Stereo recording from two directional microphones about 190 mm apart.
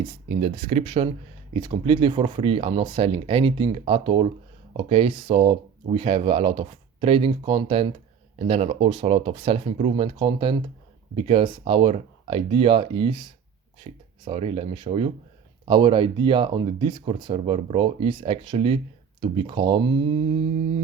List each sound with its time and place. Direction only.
0.0 s speech: 35° right (ahead or behind)